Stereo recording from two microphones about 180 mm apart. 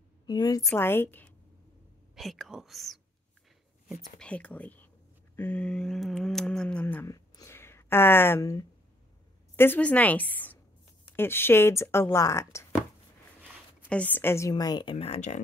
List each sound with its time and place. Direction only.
0.3 s speech: 20° left (ahead or behind)
2.1 s speech: centre (ahead or behind)
4.2 s speech: 5° left (ahead or behind)
5.3 s a sound: 10° left (ahead or behind)
9.6 s speech: 10° left (ahead or behind)
13.8 s a woman's voice: 10° left (ahead or behind); by 15.4 s 40° left (ahead or behind)